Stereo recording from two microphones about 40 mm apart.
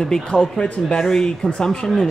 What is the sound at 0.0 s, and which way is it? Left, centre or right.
A man's voice, centre.